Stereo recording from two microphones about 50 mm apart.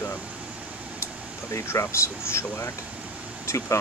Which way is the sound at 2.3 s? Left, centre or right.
Left.